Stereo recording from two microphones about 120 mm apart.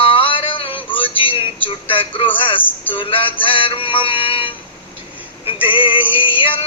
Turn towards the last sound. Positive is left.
turn(degrees=45)  # may be behind; listen again after turning